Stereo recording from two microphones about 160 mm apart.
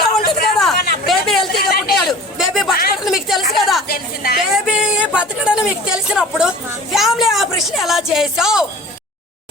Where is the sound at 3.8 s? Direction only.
70° left (ahead or behind).